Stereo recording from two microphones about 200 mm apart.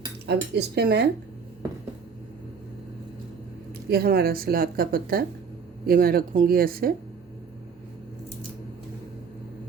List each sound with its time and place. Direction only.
0.3 s speech: 55° right (ahead or behind)
3.8 s speech: 50° right (ahead or behind)